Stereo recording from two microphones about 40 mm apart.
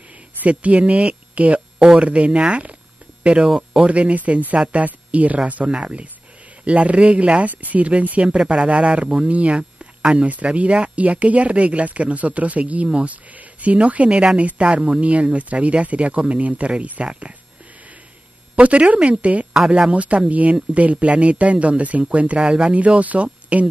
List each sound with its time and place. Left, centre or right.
0.5 s speech: right
3.4 s speech: centre
3.8 s a woman's voice: right
8.5 s a man's voice: right
18.6 s speech: right
22.4 s a man's voice: right
22.8 s speech: right